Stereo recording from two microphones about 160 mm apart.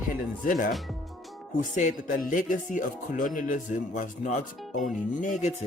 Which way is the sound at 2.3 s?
55° left (ahead or behind).